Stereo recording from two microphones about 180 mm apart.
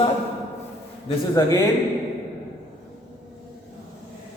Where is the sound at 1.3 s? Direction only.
20° left (ahead or behind).